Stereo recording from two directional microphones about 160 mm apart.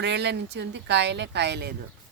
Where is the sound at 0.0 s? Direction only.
90° right.